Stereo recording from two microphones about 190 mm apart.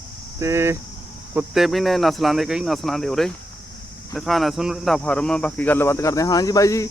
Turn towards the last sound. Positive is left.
turn(degrees=15)  # may be behind; listen again after turning